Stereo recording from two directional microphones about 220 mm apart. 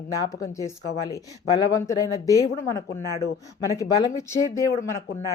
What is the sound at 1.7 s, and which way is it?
Speech, 15° left (ahead or behind).